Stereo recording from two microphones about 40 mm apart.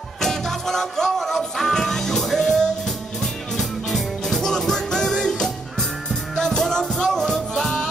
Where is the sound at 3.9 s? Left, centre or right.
Centre.